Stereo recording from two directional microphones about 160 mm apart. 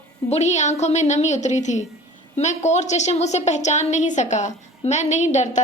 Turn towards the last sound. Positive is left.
turn(degrees=45)  # may be behind; listen again after turning